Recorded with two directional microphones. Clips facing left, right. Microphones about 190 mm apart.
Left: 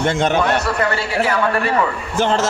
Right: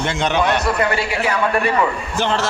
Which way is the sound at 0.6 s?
15° right (ahead or behind).